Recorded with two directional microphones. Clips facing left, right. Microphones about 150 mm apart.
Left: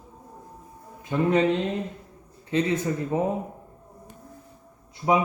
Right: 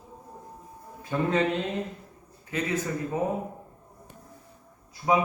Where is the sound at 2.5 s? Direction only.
25° left (ahead or behind).